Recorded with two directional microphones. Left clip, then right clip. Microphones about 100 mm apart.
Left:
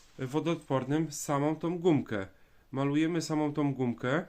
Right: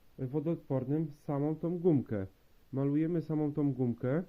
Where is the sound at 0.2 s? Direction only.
15° right (ahead or behind).